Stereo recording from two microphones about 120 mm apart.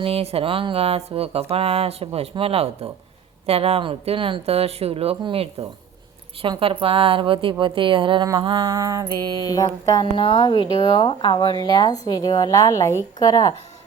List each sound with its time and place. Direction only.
0.0 s speech: 55° right (ahead or behind)
8.4 s mantra: 40° right (ahead or behind)
9.4 s speech: 30° left (ahead or behind)
10.2 s speech: 45° left (ahead or behind)